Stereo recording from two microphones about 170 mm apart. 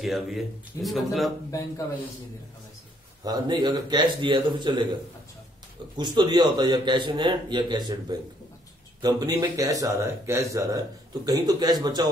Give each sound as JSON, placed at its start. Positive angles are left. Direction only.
{"t": 0.0, "sound": "speech", "side_deg": 0}
{"t": 3.3, "sound": "speech", "side_deg": -25}
{"t": 5.9, "sound": "speech", "side_deg": -25}